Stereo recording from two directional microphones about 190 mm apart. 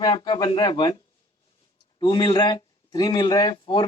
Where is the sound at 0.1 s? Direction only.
25° left (ahead or behind).